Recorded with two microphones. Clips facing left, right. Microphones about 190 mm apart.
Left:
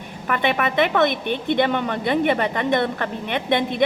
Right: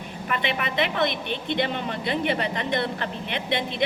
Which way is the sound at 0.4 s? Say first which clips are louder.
Left 7 dB; 50° left (ahead or behind).